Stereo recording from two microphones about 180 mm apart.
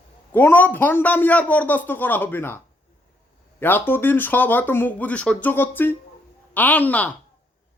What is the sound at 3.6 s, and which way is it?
A man's voice, 10° left (ahead or behind).